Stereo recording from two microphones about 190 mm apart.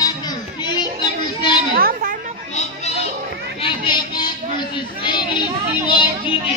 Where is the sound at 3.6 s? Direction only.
25° left (ahead or behind).